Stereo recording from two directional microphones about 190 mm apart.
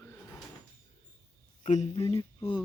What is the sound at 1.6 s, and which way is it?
Speech, 40° left (ahead or behind).